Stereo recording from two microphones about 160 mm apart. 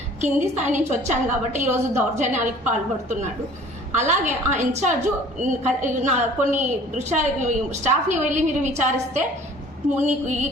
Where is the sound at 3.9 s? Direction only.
50° right (ahead or behind).